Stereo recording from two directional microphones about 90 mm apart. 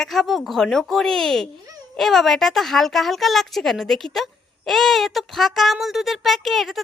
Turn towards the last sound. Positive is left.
turn(degrees=0)  # may be behind; listen again after turning